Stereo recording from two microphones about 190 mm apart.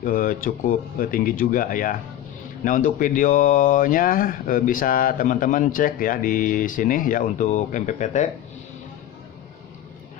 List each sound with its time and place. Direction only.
0.0 s speech: 45° left (ahead or behind)